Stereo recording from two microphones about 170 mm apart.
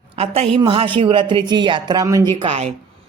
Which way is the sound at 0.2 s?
35° right (ahead or behind).